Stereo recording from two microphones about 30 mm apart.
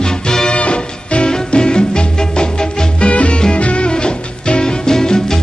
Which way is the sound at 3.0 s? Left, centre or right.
Left.